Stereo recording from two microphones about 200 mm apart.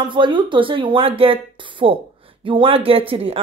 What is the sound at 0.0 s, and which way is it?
Speech, 25° right (ahead or behind).